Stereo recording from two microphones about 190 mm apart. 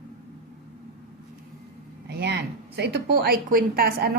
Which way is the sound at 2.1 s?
60° right (ahead or behind).